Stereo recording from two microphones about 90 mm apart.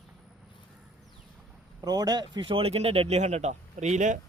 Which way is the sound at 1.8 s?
45° right (ahead or behind).